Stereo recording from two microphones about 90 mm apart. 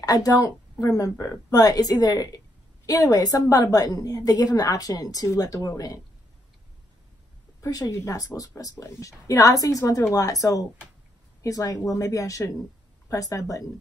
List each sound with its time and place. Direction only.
0.0 s speech: 45° left (ahead or behind)
7.6 s speech: 40° left (ahead or behind)